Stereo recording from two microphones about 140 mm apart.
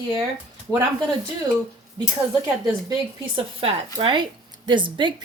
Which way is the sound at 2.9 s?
40° right (ahead or behind).